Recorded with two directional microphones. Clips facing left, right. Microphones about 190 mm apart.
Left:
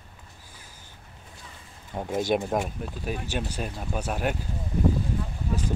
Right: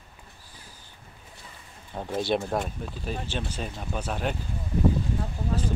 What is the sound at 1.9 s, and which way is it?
Speech, 15° left (ahead or behind).